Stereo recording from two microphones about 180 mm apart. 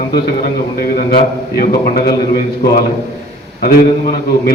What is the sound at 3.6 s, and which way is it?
Speech, 60° left (ahead or behind).